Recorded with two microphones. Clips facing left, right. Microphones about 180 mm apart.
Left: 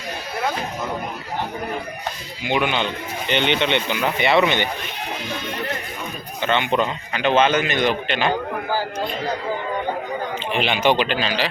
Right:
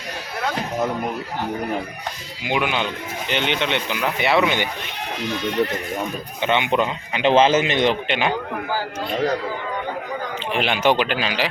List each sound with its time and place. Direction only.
2.4 s speech: 5° right (ahead or behind)
6.4 s speech: 15° right (ahead or behind)
7.2 s a man's voice: 25° right (ahead or behind)
10.5 s speech: 5° right (ahead or behind)